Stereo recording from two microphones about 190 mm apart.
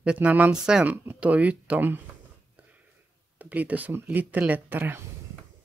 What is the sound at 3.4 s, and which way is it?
Speech, 10° right (ahead or behind).